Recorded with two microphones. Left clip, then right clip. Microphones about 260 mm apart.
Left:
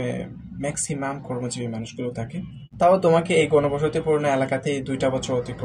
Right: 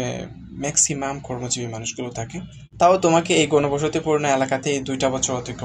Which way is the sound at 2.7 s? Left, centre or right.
Right.